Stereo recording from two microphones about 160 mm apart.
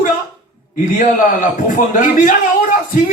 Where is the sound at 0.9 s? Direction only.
55° left (ahead or behind).